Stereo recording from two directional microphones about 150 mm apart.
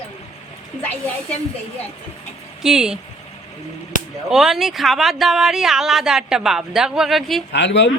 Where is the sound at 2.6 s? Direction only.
5° right (ahead or behind).